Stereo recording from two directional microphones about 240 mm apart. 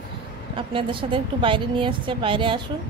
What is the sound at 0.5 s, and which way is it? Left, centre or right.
A woman's voice, right.